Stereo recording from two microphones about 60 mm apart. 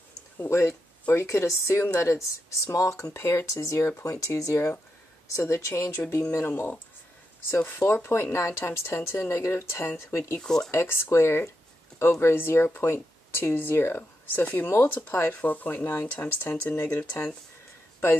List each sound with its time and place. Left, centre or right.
0.4 s a woman's voice: left
7.8 s a woman's voice: left
10.4 s speech: centre
10.7 s a woman's voice: left
15.3 s speech: left